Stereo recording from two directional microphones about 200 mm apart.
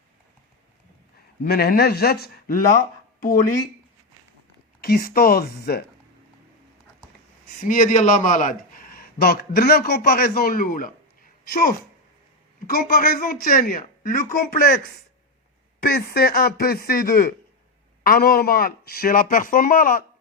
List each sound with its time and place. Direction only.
1.5 s speech: 50° left (ahead or behind)
4.8 s speech: 50° left (ahead or behind)
7.6 s speech: 40° left (ahead or behind)
12.6 s speech: 45° left (ahead or behind)
15.8 s speech: 50° left (ahead or behind)